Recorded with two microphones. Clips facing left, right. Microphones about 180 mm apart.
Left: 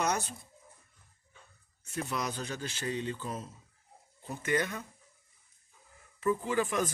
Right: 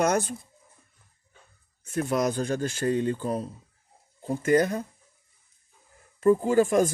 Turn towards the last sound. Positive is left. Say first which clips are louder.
# right 10 dB
turn(degrees=-45)  # may be behind; listen again after turning